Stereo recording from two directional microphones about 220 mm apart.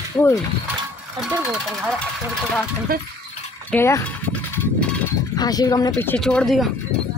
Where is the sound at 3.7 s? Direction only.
10° left (ahead or behind).